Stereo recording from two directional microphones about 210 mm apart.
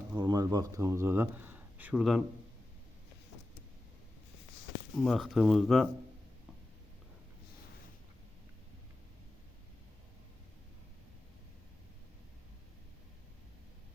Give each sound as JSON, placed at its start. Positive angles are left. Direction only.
{"t": 0.2, "sound": "speech", "side_deg": -20}
{"t": 4.9, "sound": "speech", "side_deg": 0}